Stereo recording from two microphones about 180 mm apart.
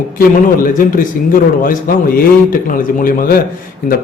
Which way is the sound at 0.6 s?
50° left (ahead or behind).